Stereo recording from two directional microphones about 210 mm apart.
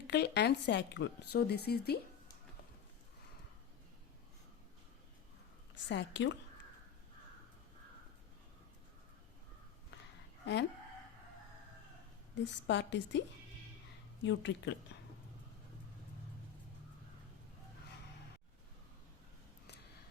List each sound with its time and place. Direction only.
0.1 s a woman's voice: 55° left (ahead or behind)
5.9 s a woman's voice: 60° left (ahead or behind)
10.4 s speech: 55° left (ahead or behind)
12.3 s a woman's voice: 60° left (ahead or behind)
14.3 s a woman's voice: 60° left (ahead or behind)